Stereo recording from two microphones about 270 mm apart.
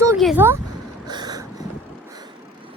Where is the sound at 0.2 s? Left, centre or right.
Centre.